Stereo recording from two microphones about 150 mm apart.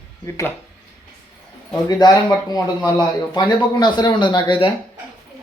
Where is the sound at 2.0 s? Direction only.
25° left (ahead or behind).